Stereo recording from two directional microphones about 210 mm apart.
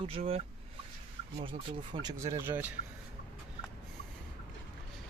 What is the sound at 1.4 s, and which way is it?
Speech, 20° right (ahead or behind).